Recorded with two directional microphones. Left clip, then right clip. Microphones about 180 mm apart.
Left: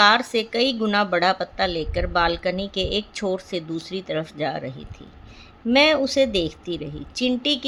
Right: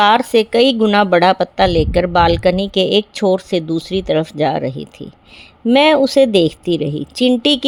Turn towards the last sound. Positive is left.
turn(degrees=-55)  # may be behind; listen again after turning